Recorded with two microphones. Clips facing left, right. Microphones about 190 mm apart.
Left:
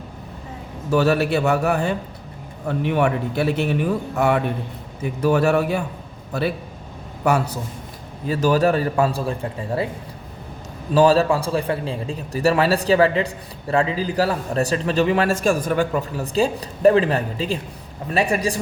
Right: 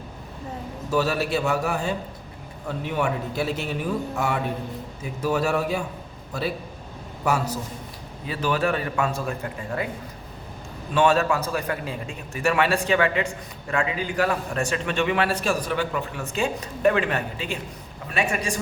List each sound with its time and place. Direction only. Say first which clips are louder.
0.9 s a man's voice: left 6 dB; 60° left (ahead or behind)
5.2 s a man's voice: left 6 dB; 60° left (ahead or behind)
7.3 s a man's voice: left 4 dB; 60° left (ahead or behind)
8.3 s a man's voice: left 6 dB; 40° left (ahead or behind)
10.9 s a man's voice: left 5 dB; 35° left (ahead or behind)